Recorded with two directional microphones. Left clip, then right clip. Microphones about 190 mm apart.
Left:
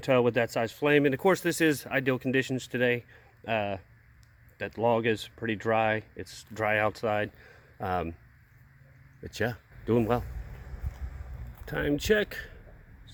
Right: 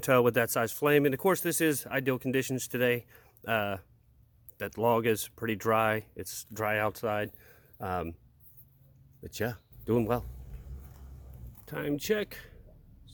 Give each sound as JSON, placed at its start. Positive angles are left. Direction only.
{"t": 0.0, "sound": "speech", "side_deg": -30}
{"t": 9.2, "sound": "speech", "side_deg": -10}
{"t": 11.6, "sound": "speech", "side_deg": 5}